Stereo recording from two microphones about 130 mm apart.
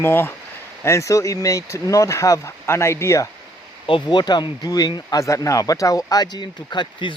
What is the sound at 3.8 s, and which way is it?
Speech, 40° left (ahead or behind).